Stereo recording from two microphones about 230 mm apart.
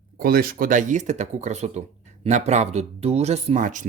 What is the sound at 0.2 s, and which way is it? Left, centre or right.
Speech, right.